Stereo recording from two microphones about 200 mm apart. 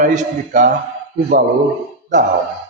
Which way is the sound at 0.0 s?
40° right (ahead or behind).